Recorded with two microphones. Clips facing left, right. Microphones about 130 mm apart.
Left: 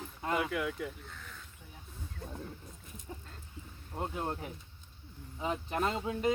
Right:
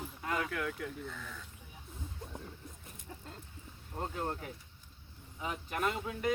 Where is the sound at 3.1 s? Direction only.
20° left (ahead or behind).